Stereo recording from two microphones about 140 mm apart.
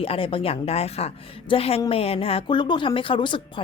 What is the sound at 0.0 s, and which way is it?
A woman's voice, 40° left (ahead or behind).